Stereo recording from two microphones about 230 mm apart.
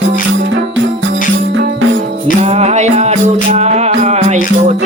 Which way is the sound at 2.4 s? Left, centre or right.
Right.